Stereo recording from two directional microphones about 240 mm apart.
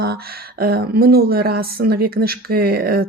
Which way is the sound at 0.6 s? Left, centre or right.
Right.